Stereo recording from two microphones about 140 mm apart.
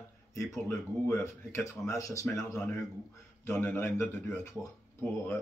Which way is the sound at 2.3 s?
5° left (ahead or behind).